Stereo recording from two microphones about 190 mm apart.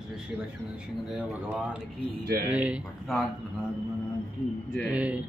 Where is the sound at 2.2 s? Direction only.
50° right (ahead or behind).